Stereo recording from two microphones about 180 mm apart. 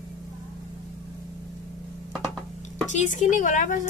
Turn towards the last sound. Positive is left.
turn(degrees=45)  # may be behind; listen again after turning